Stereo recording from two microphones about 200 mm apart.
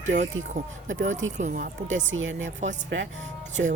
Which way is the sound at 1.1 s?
75° right (ahead or behind).